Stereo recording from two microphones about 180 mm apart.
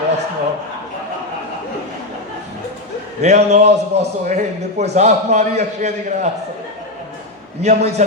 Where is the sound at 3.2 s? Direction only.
40° right (ahead or behind).